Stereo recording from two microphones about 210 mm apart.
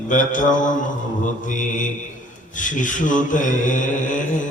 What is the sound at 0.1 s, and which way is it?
Mantra, 40° left (ahead or behind).